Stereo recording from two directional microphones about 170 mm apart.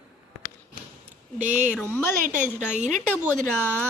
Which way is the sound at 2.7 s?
45° right (ahead or behind).